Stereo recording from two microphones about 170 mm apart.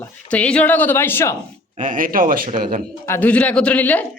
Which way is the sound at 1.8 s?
50° right (ahead or behind).